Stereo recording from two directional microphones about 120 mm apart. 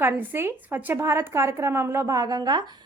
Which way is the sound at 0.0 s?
15° right (ahead or behind).